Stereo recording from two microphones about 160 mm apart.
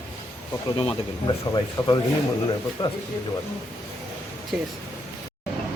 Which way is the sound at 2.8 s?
25° left (ahead or behind).